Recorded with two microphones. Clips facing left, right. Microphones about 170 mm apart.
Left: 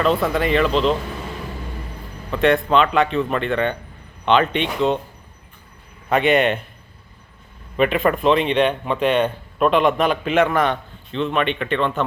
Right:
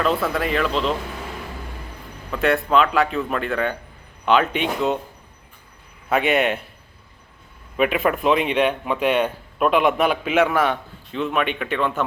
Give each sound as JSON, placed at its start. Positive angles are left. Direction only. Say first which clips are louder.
{"t": 0.0, "sound": "speech", "louder": "left 3 dB", "side_deg": 0}
{"t": 2.3, "sound": "speech", "louder": "left 2 dB", "side_deg": 0}
{"t": 6.1, "sound": "speech", "louder": "left 3 dB", "side_deg": -5}
{"t": 7.8, "sound": "speech", "louder": "left 2 dB", "side_deg": -5}